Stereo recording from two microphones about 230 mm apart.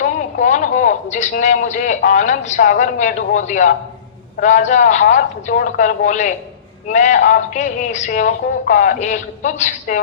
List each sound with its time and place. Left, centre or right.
0.0 s a man's voice: left